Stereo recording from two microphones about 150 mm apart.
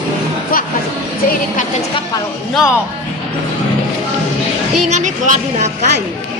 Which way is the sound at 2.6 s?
Centre (ahead or behind).